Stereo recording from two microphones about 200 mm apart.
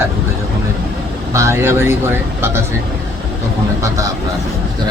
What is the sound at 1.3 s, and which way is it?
Speech, 15° right (ahead or behind).